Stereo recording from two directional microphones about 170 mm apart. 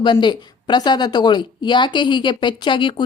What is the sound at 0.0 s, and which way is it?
A woman's voice, 25° left (ahead or behind).